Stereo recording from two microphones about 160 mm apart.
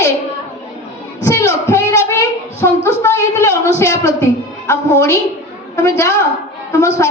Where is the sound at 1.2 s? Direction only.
20° left (ahead or behind).